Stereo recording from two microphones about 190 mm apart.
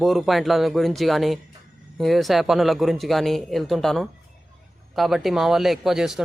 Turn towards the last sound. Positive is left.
turn(degrees=0)  # may be behind; listen again after turning